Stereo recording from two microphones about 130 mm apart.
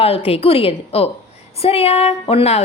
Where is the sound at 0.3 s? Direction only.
50° left (ahead or behind).